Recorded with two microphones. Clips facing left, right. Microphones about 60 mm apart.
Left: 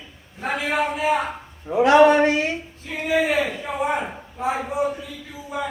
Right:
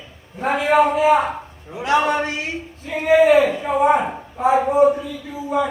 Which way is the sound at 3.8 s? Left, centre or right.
Right.